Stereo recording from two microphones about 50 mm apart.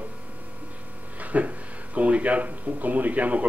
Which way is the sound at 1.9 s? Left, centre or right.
Right.